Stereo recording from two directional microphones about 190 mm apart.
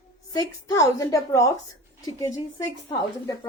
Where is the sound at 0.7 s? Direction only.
15° left (ahead or behind).